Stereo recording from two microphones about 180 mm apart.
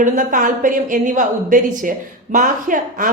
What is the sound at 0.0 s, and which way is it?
A woman's voice, 45° right (ahead or behind).